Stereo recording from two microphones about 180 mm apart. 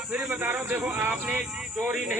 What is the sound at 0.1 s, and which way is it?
A man's voice, 10° right (ahead or behind).